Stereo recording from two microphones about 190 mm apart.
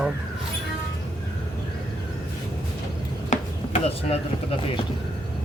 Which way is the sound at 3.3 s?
30° left (ahead or behind).